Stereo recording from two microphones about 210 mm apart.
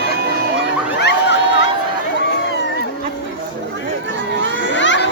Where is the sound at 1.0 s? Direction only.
55° left (ahead or behind).